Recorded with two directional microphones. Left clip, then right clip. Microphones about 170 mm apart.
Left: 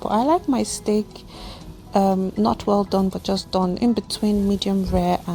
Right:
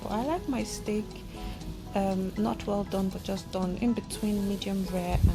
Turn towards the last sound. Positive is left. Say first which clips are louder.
# left 11 dB
turn(degrees=50)  # may be behind; listen again after turning